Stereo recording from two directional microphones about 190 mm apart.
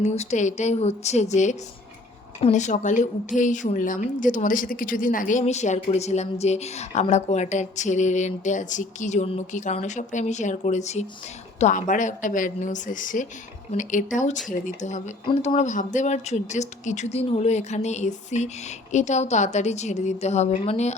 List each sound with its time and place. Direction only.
0.0 s a woman's voice: 35° left (ahead or behind)